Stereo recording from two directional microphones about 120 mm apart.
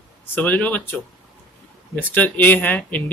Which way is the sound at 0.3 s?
15° left (ahead or behind).